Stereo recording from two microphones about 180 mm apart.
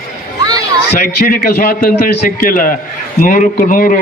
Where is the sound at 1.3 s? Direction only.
50° left (ahead or behind).